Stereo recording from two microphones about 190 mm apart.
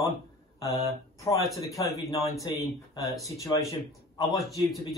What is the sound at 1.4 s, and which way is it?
Speech, centre (ahead or behind).